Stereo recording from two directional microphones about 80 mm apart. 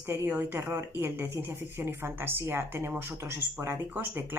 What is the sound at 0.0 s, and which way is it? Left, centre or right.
Speech, right.